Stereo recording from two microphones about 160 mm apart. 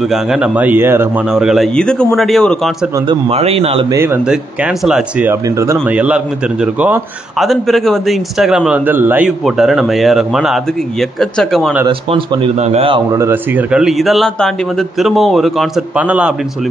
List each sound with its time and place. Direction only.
0.0 s speech: 5° right (ahead or behind)
1.3 s speech: 5° right (ahead or behind)
3.1 s speech: 40° right (ahead or behind)
3.9 s speech: 15° right (ahead or behind); by 11.7 s centre (ahead or behind)
11.9 s speech: 35° right (ahead or behind)
13.1 s speech: 15° right (ahead or behind)